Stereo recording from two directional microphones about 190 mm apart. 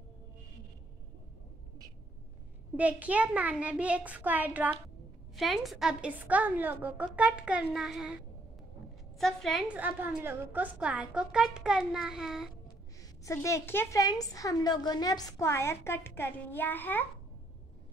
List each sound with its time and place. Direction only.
2.7 s a woman's voice: 5° right (ahead or behind)
9.2 s a woman's voice: centre (ahead or behind)
13.2 s a woman's voice: 15° left (ahead or behind)